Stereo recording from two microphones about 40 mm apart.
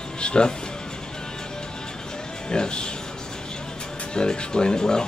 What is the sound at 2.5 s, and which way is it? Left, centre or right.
Speech, left.